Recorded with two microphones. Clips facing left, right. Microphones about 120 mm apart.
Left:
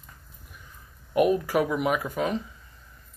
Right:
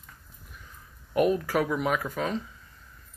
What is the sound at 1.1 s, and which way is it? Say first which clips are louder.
Speech: left 2 dB; 10° left (ahead or behind).